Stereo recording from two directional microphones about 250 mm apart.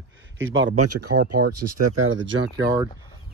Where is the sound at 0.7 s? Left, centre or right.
Right.